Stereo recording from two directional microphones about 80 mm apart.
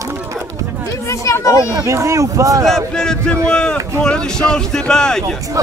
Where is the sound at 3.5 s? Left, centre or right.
Centre.